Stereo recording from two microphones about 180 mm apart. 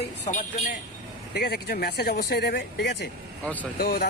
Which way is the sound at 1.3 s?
60° left (ahead or behind).